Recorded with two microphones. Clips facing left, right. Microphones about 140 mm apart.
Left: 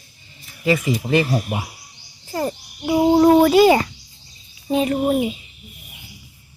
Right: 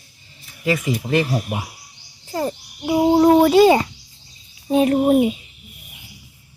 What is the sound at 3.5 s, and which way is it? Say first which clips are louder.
Speech: right 1 dB; 25° right (ahead or behind).